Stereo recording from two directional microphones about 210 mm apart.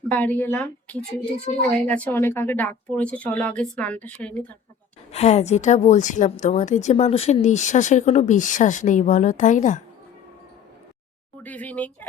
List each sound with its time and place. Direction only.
0.0 s speech: 10° left (ahead or behind)
5.1 s a woman's voice: 30° left (ahead or behind)
11.4 s speech: 5° left (ahead or behind)